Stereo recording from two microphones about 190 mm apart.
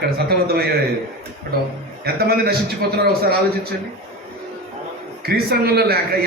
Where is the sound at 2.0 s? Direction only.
55° right (ahead or behind).